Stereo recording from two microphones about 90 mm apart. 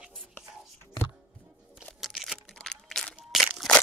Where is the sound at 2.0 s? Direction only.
Centre (ahead or behind).